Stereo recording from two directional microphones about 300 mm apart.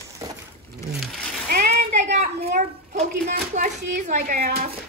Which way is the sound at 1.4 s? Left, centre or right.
Right.